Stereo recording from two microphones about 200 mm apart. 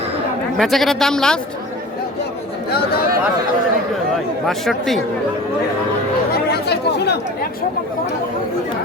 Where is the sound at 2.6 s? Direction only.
50° left (ahead or behind).